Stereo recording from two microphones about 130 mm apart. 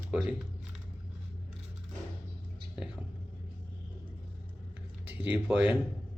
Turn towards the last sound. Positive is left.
turn(degrees=-10)  # may be behind; listen again after turning